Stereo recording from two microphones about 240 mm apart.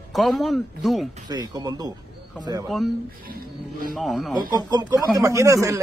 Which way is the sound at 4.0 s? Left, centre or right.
Centre.